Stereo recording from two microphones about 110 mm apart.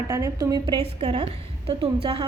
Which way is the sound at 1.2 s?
60° right (ahead or behind).